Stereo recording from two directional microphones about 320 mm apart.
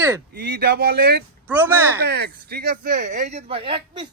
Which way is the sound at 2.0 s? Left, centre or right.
Right.